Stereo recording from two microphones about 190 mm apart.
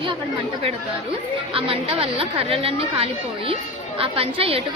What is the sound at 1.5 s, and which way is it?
Speech, 30° right (ahead or behind).